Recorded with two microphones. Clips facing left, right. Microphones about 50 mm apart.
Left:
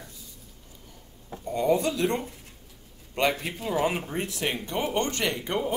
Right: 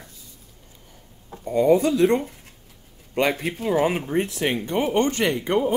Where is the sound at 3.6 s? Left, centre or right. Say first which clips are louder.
Right 5 dB; right.